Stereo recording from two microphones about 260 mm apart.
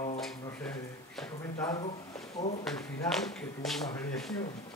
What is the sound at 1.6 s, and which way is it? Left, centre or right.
Speech, centre.